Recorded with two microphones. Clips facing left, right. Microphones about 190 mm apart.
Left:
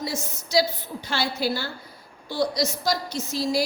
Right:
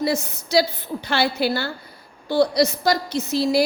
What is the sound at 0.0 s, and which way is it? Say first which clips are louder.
A woman's voice: right 8 dB; 60° right (ahead or behind).